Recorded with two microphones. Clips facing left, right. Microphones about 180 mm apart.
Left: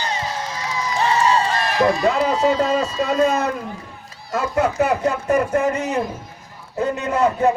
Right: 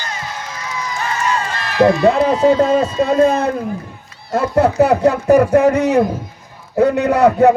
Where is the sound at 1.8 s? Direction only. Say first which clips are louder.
Right 7 dB; 35° right (ahead or behind).